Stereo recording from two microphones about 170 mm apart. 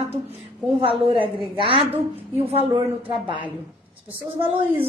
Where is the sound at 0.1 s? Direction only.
35° right (ahead or behind).